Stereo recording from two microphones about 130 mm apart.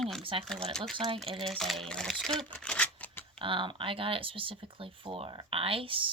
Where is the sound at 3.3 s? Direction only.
40° right (ahead or behind).